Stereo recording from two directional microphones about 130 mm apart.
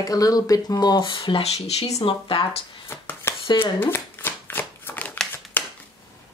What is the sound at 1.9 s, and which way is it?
Speech, 40° left (ahead or behind).